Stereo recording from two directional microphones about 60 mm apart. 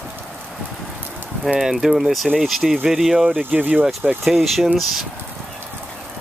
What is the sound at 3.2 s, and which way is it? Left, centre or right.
Speech, right.